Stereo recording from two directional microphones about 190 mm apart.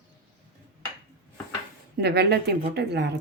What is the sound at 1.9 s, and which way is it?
Speech, 60° right (ahead or behind).